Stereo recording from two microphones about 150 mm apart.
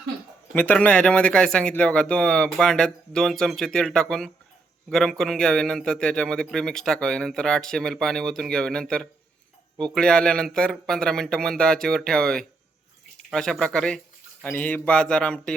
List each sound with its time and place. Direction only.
0.5 s a man's voice: 10° left (ahead or behind)